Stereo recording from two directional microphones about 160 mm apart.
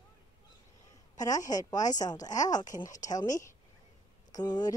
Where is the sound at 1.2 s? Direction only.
20° left (ahead or behind).